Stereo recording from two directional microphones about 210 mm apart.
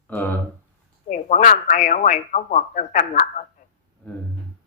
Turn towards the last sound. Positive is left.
turn(degrees=35)  # may be behind; listen again after turning